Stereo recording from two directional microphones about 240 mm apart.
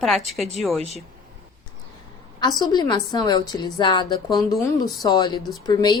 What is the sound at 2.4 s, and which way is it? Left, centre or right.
A woman's voice, centre.